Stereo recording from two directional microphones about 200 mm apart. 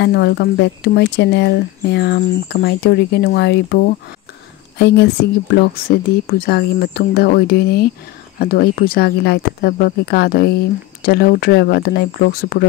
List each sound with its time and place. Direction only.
0.0 s speech: 60° left (ahead or behind)
5.8 s speech: 50° left (ahead or behind)